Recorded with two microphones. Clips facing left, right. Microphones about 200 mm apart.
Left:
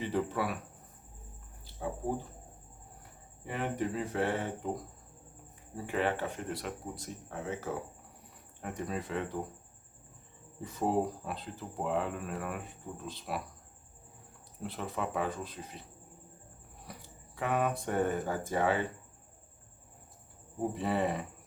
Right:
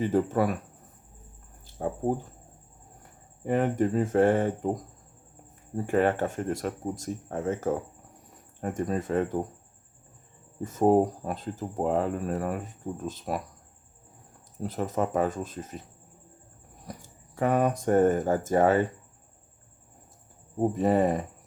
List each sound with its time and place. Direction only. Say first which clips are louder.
0.0 s speech: right 8 dB; 45° right (ahead or behind)
1.6 s speech: right 7 dB; 50° right (ahead or behind)
3.4 s speech: right 9 dB; 45° right (ahead or behind)
10.6 s speech: right 9 dB; 45° right (ahead or behind)
14.6 s speech: right 8 dB; 40° right (ahead or behind)
16.8 s speech: right 6 dB; 45° right (ahead or behind)
20.6 s speech: right 8 dB; 45° right (ahead or behind)